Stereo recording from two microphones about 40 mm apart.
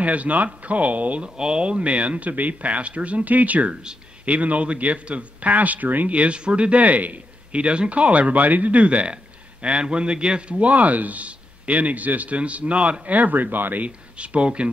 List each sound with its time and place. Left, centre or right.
0.0 s speech: right
1.2 s speech: right
6.1 s a man's voice: right
10.6 s speech: right
13.8 s speech: right